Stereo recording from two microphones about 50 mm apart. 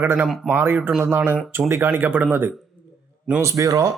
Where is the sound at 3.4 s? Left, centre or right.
Right.